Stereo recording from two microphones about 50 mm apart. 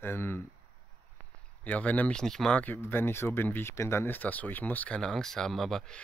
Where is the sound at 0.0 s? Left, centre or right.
Left.